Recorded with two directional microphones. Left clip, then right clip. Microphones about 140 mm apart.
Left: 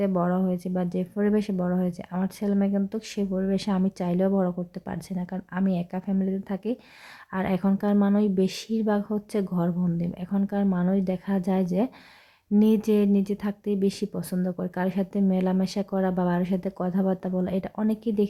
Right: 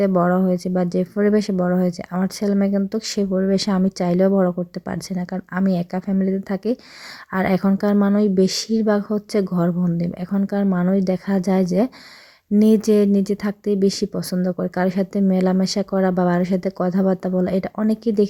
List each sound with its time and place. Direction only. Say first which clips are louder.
0.0 s speech: right 8 dB; 30° right (ahead or behind)